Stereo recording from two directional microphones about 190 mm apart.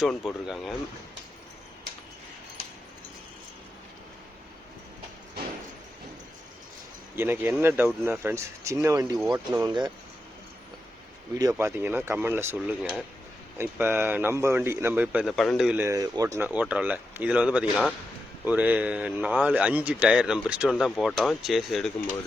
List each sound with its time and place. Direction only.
0.3 s speech: centre (ahead or behind)
7.2 s speech: 10° right (ahead or behind)
11.3 s speech: 15° right (ahead or behind); by 21.9 s centre (ahead or behind)